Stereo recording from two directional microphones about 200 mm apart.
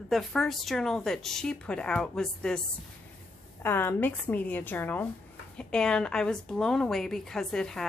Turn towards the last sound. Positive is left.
turn(degrees=5)  # may be behind; listen again after turning